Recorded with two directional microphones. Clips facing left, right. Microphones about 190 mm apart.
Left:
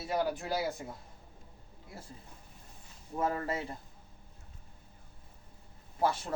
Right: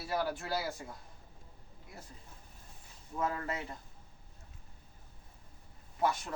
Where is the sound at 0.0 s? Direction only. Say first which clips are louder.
Left 3 dB; 20° left (ahead or behind).